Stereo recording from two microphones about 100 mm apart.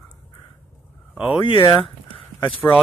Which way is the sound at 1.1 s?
10° right (ahead or behind).